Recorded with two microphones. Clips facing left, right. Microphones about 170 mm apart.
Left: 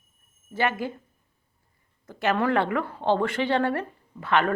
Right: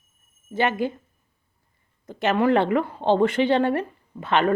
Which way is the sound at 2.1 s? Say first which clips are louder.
Right 4 dB; 20° right (ahead or behind).